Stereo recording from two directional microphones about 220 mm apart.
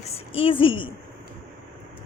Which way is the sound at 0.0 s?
25° left (ahead or behind).